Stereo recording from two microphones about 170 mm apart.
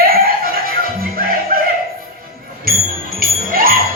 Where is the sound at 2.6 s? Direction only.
60° right (ahead or behind).